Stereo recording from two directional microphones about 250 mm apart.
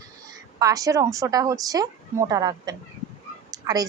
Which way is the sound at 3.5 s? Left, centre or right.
Centre.